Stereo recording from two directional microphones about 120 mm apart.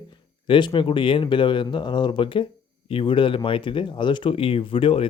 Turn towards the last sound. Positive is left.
turn(degrees=45)  # may be behind; listen again after turning